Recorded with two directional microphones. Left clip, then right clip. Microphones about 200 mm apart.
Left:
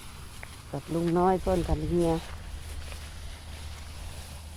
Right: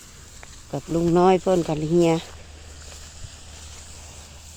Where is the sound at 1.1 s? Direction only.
55° right (ahead or behind).